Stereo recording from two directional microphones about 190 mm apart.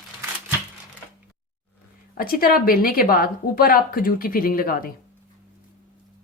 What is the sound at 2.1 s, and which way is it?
A woman's voice, 50° left (ahead or behind).